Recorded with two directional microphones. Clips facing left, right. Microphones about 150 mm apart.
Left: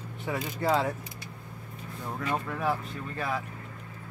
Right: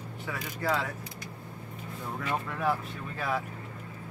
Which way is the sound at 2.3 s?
Centre (ahead or behind).